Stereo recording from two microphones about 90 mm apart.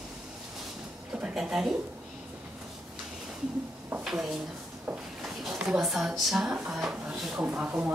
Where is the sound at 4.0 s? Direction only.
5° right (ahead or behind).